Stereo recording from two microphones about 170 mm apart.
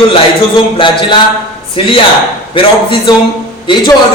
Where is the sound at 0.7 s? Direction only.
30° left (ahead or behind).